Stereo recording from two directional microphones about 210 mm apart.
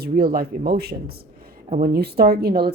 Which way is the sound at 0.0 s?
45° right (ahead or behind).